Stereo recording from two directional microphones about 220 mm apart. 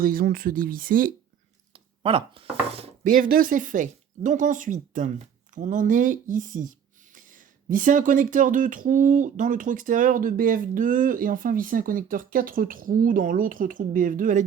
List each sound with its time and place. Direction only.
0.0 s speech: 40° right (ahead or behind)
2.0 s speech: 25° right (ahead or behind)